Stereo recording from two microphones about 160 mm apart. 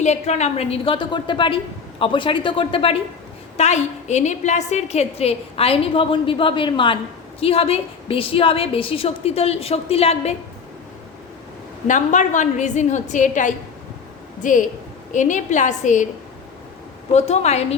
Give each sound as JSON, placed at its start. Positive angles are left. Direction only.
{"t": 0.0, "sound": "a woman's voice", "side_deg": 45}
{"t": 11.9, "sound": "a woman's voice", "side_deg": 50}
{"t": 17.1, "sound": "a woman's voice", "side_deg": 45}